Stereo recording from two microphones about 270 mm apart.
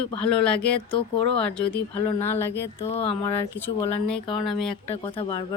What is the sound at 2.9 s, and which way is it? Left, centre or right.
Speech, centre.